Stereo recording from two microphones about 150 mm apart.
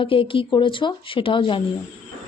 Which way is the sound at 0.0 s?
35° left (ahead or behind).